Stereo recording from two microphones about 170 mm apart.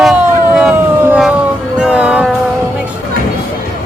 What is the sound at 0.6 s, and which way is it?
Howl, 5° right (ahead or behind).